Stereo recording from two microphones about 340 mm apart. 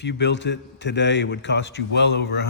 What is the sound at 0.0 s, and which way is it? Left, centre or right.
A man's voice, left.